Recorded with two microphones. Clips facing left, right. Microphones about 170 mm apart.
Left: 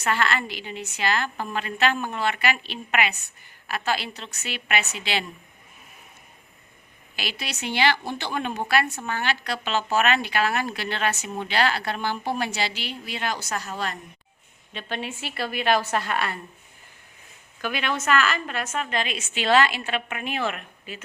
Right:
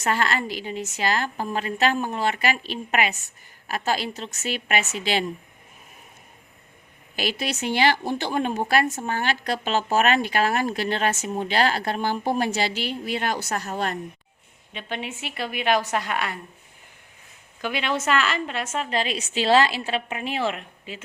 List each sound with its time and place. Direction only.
0.0 s a woman's voice: 40° right (ahead or behind)
7.2 s a woman's voice: 45° right (ahead or behind)
14.7 s a woman's voice: 15° right (ahead or behind)
17.6 s a woman's voice: 25° right (ahead or behind)